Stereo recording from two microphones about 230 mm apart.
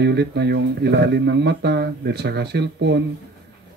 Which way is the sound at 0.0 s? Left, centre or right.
Right.